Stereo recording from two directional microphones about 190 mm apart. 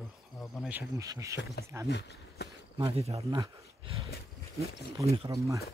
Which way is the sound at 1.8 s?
60° left (ahead or behind).